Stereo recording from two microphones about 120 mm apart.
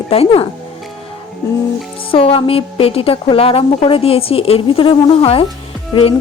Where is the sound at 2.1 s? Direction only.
50° left (ahead or behind).